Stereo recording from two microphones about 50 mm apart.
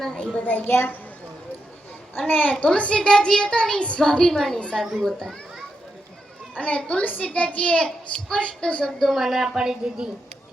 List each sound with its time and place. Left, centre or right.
0.0 s child singing: centre
0.4 s a child's voice: left
2.1 s a child's voice: left
2.5 s a child's voice: left
3.0 s child singing: centre
6.5 s a woman's voice: left; by 10.1 s centre